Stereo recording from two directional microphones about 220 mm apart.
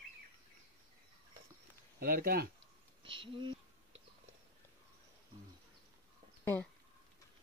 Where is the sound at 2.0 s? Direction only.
40° right (ahead or behind).